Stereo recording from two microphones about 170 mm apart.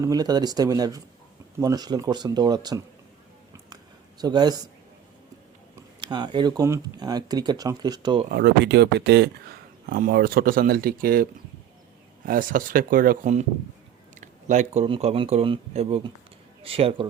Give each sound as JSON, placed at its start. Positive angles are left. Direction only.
{"t": 0.0, "sound": "speech", "side_deg": -20}
{"t": 4.2, "sound": "speech", "side_deg": -25}
{"t": 6.0, "sound": "speech", "side_deg": -25}
{"t": 8.3, "sound": "speech", "side_deg": -70}
{"t": 9.8, "sound": "speech", "side_deg": -60}
{"t": 14.2, "sound": "a sound", "side_deg": -45}
{"t": 14.8, "sound": "speech", "side_deg": -30}